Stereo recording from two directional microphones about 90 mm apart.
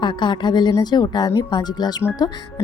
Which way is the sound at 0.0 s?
60° left (ahead or behind).